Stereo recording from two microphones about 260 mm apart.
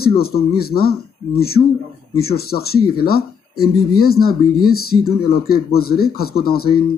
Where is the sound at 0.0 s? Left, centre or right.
Left.